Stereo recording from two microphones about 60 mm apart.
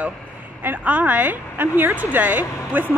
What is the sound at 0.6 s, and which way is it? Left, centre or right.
A woman's voice, right.